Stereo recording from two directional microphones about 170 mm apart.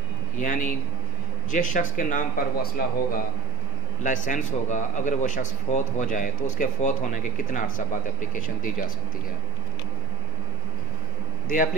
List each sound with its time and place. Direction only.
0.4 s a man's voice: 50° left (ahead or behind)
11.4 s a man's voice: 50° left (ahead or behind)